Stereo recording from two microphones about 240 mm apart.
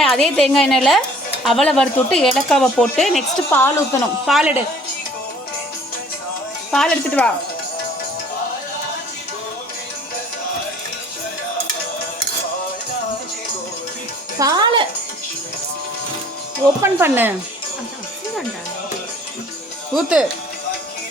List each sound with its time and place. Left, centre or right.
0.0 s speech: centre
6.7 s speech: centre
14.3 s speech: centre
16.8 s speech: centre
19.9 s speech: centre